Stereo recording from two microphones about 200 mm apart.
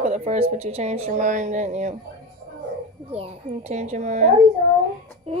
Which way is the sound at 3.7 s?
35° right (ahead or behind).